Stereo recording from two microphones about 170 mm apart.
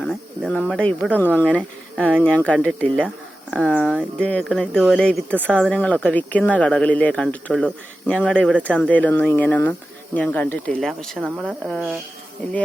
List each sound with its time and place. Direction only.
0.0 s speech: 5° left (ahead or behind)
11.2 s speech: 10° right (ahead or behind)
11.6 s speech: 5° left (ahead or behind)